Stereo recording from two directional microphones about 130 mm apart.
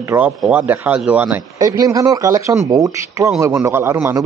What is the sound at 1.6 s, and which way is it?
A man's voice, 25° right (ahead or behind).